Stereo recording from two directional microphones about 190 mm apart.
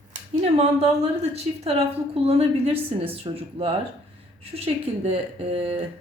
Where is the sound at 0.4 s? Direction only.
35° right (ahead or behind).